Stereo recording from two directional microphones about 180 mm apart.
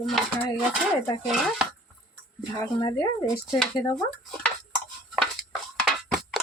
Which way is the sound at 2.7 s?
25° left (ahead or behind).